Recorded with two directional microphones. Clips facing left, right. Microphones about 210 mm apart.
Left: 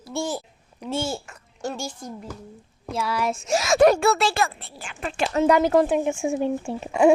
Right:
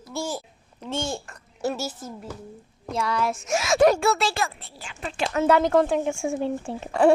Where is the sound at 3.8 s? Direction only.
60° left (ahead or behind).